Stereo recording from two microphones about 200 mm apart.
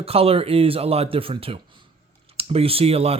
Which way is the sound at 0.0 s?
30° right (ahead or behind).